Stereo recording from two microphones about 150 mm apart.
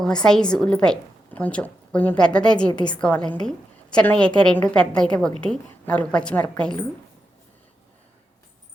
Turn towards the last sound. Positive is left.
turn(degrees=5)  # may be behind; listen again after turning